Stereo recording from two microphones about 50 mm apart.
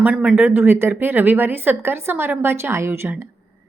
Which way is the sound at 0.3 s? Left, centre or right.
Right.